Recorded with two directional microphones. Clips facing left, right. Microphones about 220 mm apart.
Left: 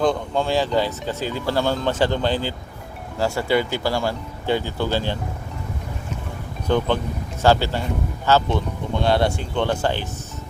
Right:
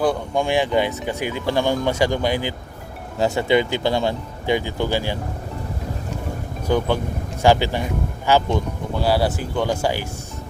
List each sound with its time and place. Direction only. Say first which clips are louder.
0.0 s speech: even; 10° right (ahead or behind)
6.7 s speech: even; 10° right (ahead or behind)